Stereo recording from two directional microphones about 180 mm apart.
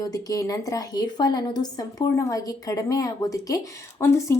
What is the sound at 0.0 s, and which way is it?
A woman's voice, 20° left (ahead or behind).